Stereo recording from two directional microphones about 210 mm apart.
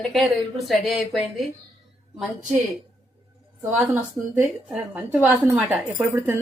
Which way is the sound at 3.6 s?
10° right (ahead or behind).